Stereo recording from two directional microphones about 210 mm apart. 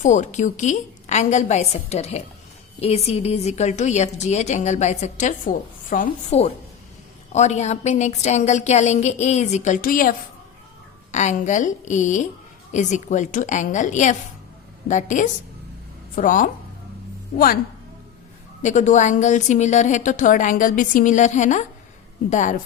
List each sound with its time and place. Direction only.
0.0 s a woman's voice: 35° left (ahead or behind)
18.6 s a woman's voice: 35° left (ahead or behind)